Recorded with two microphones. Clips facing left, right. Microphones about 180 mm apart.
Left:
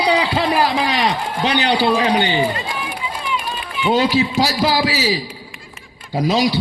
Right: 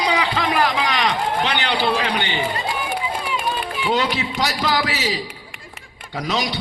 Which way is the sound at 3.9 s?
30° left (ahead or behind).